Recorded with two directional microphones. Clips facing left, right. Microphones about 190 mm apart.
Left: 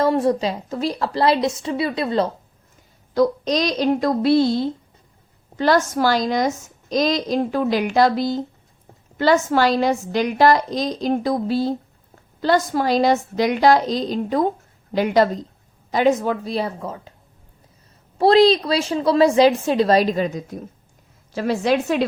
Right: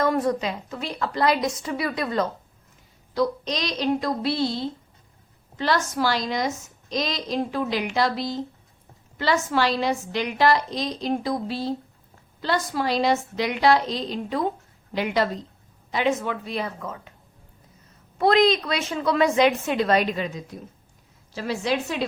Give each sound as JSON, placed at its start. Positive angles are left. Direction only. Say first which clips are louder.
{"t": 0.0, "sound": "a woman's voice", "louder": "left 4 dB", "side_deg": 30}
{"t": 3.2, "sound": "a woman's voice", "louder": "left 6 dB", "side_deg": 45}
{"t": 5.5, "sound": "a woman's voice", "louder": "left 6 dB", "side_deg": 50}
{"t": 18.2, "sound": "a woman's voice", "louder": "left 5 dB", "side_deg": 30}